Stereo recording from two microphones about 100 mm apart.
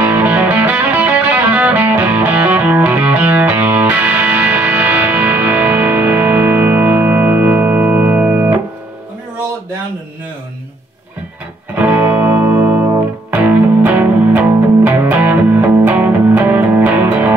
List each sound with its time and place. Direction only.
0.0 s music: 15° right (ahead or behind)
11.7 s music: 15° right (ahead or behind)